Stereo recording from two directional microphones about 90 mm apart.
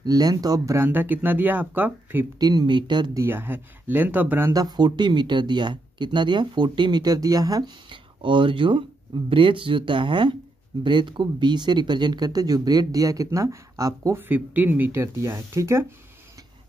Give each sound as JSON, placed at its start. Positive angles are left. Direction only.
{"t": 0.0, "sound": "speech", "side_deg": -45}
{"t": 0.7, "sound": "speech", "side_deg": -20}
{"t": 2.3, "sound": "speech", "side_deg": -50}
{"t": 3.2, "sound": "speech", "side_deg": -25}
{"t": 4.5, "sound": "speech", "side_deg": -50}
{"t": 7.9, "sound": "speech", "side_deg": -65}
{"t": 14.1, "sound": "speech", "side_deg": -20}